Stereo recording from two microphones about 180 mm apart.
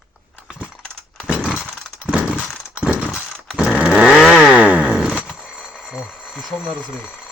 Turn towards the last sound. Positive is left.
turn(degrees=-5)  # may be behind; listen again after turning